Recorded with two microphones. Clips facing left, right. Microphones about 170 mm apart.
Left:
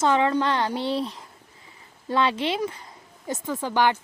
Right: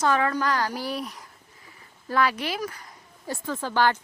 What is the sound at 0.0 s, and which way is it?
Speech, 20° left (ahead or behind).